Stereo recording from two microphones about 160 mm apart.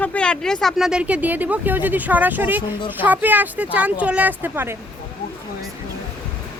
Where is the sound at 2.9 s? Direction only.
10° right (ahead or behind).